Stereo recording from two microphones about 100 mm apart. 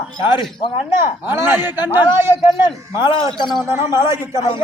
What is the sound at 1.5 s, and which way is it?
Speech, 20° right (ahead or behind).